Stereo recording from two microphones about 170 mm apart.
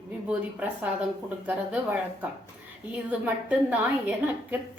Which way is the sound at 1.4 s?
10° right (ahead or behind).